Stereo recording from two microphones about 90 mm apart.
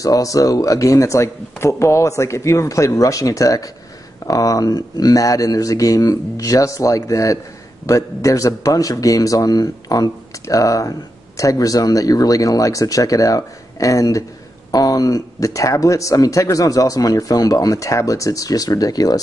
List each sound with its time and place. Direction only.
0.0 s speech: 40° left (ahead or behind)